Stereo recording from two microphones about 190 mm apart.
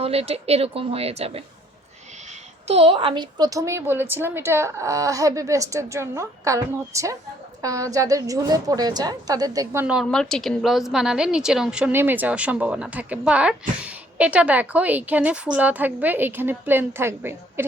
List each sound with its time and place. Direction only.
0.0 s speech: 30° right (ahead or behind)
2.6 s a woman's voice: 30° right (ahead or behind)
9.8 s a woman's voice: 5° right (ahead or behind)